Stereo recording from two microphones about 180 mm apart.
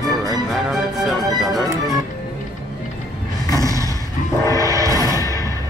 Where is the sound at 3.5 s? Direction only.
20° right (ahead or behind).